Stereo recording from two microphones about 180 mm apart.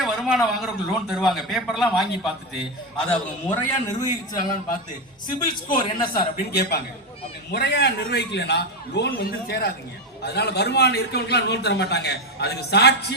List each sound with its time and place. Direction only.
0.0 s a man's voice: centre (ahead or behind)
3.1 s a man's voice: 10° left (ahead or behind)
5.6 s a man's voice: 25° left (ahead or behind)
6.3 s a man's voice: 60° left (ahead or behind)